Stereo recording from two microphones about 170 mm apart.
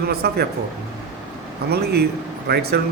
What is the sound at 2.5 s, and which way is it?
Speech, 65° right (ahead or behind).